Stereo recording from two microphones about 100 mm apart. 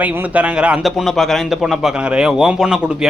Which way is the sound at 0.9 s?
Centre (ahead or behind).